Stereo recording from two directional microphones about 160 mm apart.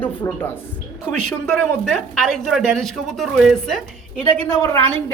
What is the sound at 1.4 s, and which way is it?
A man's voice, centre (ahead or behind).